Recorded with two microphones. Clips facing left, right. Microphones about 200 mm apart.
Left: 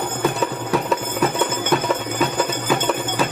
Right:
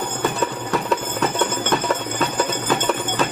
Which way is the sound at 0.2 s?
Centre (ahead or behind).